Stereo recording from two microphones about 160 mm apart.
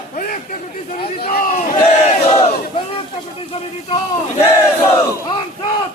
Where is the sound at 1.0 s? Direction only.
70° left (ahead or behind).